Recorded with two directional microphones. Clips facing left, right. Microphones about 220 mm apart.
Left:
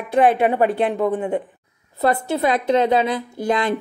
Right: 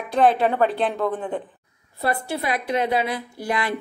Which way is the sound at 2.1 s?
20° left (ahead or behind).